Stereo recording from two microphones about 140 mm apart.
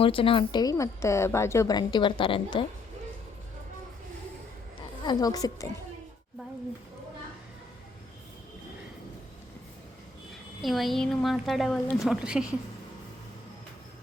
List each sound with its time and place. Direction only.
0.0 s a woman's voice: 40° left (ahead or behind)
5.0 s a woman's voice: 25° left (ahead or behind)
10.6 s a woman's voice: centre (ahead or behind)